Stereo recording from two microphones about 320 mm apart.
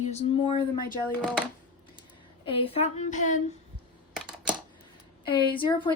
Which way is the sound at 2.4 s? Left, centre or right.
Centre.